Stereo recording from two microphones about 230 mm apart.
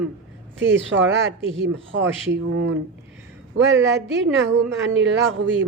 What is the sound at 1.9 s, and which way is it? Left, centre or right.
A woman's voice, right.